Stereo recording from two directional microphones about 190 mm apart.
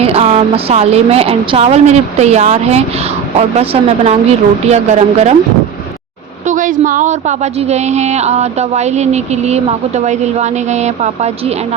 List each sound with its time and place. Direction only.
0.0 s a woman's voice: 30° right (ahead or behind)
6.4 s a woman's voice: 40° right (ahead or behind)